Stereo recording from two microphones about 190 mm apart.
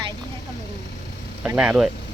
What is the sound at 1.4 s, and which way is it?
Speech, 5° right (ahead or behind).